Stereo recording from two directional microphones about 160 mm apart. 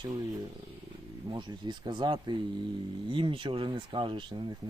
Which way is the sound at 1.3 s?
30° right (ahead or behind).